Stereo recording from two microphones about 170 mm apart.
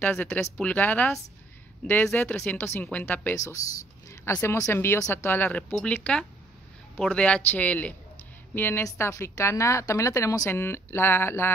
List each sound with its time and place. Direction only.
0.0 s a woman's voice: 10° left (ahead or behind)